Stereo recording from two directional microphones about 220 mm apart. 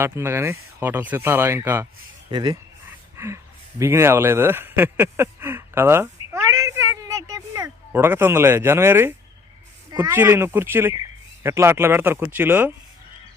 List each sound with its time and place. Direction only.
0.0 s speech: 10° right (ahead or behind)
3.2 s a sound: 10° right (ahead or behind)
9.9 s speech: 15° right (ahead or behind)